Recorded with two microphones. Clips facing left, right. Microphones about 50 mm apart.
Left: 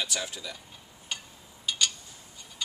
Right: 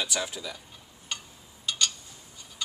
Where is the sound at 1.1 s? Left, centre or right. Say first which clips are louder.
Even; centre.